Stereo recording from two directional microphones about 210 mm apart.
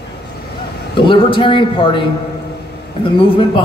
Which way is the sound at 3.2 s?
25° left (ahead or behind).